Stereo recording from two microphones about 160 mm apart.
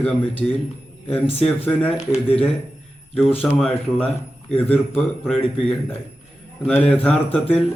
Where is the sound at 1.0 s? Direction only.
35° left (ahead or behind).